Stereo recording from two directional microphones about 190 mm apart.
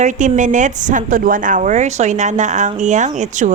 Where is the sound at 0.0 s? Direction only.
40° right (ahead or behind).